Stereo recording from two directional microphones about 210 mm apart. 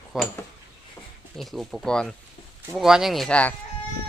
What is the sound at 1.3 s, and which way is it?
Speech, centre (ahead or behind).